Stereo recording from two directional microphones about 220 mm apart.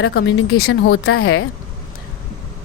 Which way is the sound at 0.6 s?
70° left (ahead or behind).